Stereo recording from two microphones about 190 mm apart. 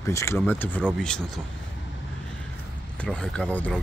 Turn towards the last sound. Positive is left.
turn(degrees=5)  # may be behind; listen again after turning